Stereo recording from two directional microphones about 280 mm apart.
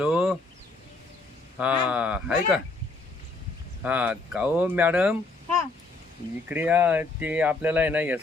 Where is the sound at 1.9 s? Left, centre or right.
Centre.